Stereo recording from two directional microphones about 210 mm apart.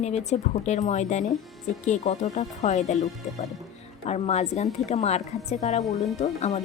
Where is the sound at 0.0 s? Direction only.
30° left (ahead or behind).